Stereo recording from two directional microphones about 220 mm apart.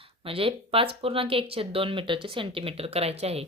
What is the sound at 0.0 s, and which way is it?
A woman's voice, 25° right (ahead or behind).